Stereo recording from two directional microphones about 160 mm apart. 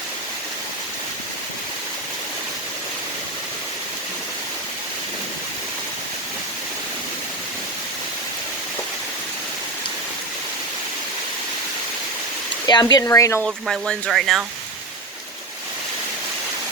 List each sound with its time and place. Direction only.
12.6 s speech: 25° left (ahead or behind)
13.4 s speech: centre (ahead or behind)